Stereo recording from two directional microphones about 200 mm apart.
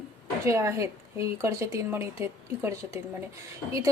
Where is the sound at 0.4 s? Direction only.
15° right (ahead or behind).